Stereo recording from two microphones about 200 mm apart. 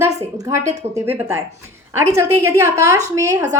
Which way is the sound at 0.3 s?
15° right (ahead or behind).